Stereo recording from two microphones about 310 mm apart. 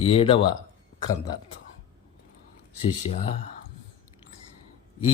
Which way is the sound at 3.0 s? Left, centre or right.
Centre.